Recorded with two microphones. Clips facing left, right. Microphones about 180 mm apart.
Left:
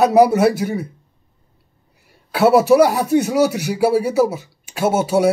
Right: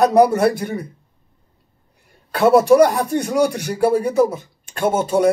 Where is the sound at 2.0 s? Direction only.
5° left (ahead or behind).